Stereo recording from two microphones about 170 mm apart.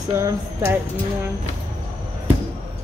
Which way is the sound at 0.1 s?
15° right (ahead or behind).